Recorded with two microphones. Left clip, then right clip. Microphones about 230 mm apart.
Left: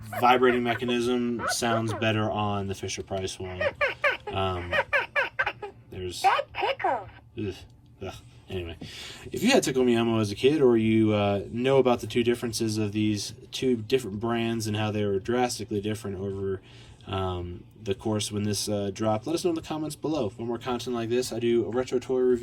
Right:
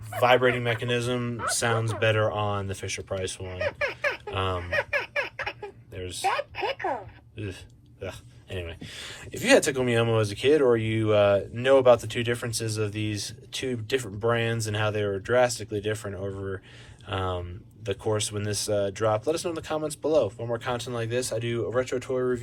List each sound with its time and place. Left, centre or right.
0.2 s speech: centre